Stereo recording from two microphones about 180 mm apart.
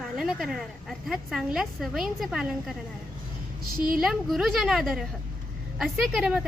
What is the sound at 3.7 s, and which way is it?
Speech, 50° right (ahead or behind).